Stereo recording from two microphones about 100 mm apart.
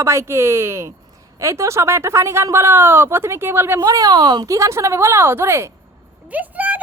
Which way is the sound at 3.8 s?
40° right (ahead or behind).